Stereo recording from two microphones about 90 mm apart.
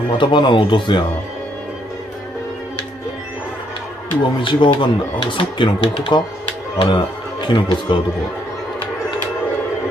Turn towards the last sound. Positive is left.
turn(degrees=65)  # may be behind; listen again after turning